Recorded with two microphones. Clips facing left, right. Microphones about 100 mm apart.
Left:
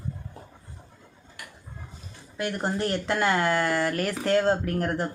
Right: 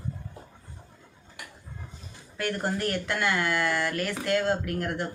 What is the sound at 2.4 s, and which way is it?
Speech, 15° left (ahead or behind).